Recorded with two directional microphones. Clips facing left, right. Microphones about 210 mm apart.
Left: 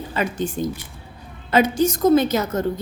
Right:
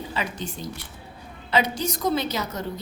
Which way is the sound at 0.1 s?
50° left (ahead or behind).